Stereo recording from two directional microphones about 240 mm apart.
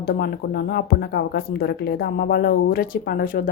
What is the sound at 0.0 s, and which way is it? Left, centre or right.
Speech, left.